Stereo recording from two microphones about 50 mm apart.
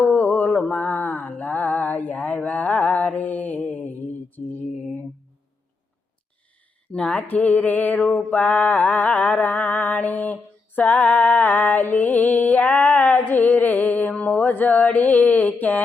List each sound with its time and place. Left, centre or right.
0.0 s mantra: left
6.9 s music: left
10.8 s female singing: left
11.2 s music: left